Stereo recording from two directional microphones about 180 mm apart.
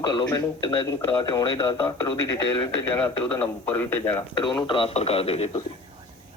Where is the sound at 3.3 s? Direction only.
10° left (ahead or behind).